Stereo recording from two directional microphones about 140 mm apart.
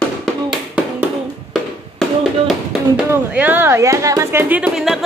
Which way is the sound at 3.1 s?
10° right (ahead or behind).